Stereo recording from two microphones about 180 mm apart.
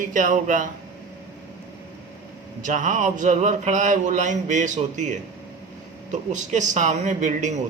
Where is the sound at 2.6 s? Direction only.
45° right (ahead or behind).